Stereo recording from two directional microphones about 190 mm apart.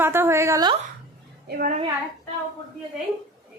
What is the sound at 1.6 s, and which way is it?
Speech, 40° right (ahead or behind).